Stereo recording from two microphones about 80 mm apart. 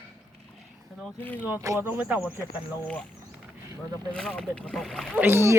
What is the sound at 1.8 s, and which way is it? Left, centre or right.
Speech, right.